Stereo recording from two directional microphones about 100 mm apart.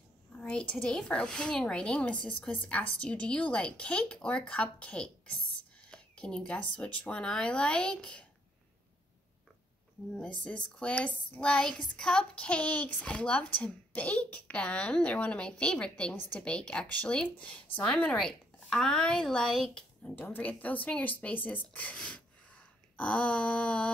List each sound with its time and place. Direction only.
0.4 s speech: 10° left (ahead or behind)
10.1 s speech: 10° left (ahead or behind)
20.2 s speech: 15° left (ahead or behind)